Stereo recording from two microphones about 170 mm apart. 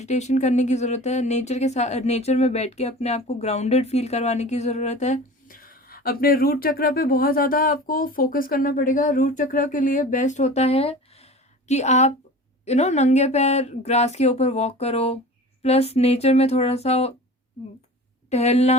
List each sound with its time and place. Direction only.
0.0 s speech: 40° left (ahead or behind)
18.3 s speech: 40° left (ahead or behind)